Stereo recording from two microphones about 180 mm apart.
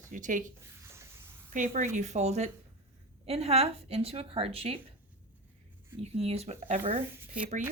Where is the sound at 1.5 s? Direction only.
45° right (ahead or behind).